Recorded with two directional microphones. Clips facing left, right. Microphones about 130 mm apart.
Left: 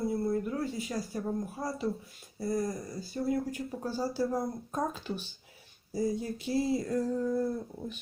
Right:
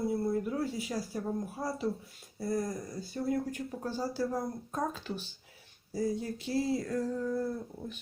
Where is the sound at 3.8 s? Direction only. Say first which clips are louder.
Left 2 dB; 10° left (ahead or behind).